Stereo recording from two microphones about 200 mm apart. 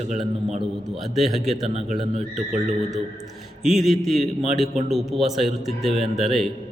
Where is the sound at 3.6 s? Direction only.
Centre (ahead or behind).